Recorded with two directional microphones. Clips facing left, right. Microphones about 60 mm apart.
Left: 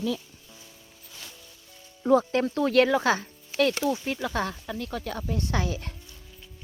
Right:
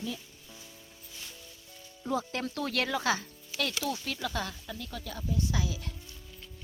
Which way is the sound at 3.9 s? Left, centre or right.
Left.